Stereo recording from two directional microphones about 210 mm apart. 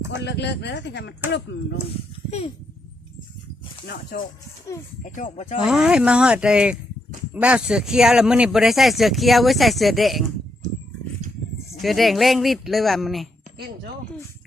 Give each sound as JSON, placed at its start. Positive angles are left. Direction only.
{"t": 0.3, "sound": "speech", "side_deg": 55}
{"t": 3.8, "sound": "speech", "side_deg": 45}
{"t": 5.6, "sound": "speech", "side_deg": -5}
{"t": 11.8, "sound": "speech", "side_deg": 0}